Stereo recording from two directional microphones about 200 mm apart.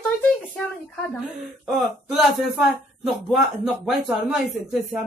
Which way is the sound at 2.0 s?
Centre (ahead or behind).